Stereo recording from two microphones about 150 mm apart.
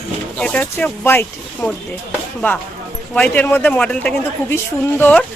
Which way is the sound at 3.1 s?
10° left (ahead or behind).